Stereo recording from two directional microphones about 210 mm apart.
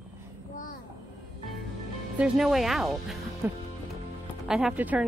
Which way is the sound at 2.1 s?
5° right (ahead or behind).